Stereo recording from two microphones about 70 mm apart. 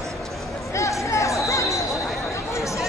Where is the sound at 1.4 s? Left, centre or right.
Left.